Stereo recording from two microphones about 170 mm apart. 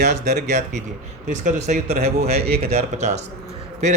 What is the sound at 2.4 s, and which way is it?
Speech, 65° right (ahead or behind).